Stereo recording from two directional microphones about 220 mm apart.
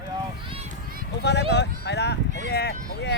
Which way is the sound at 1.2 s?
50° left (ahead or behind).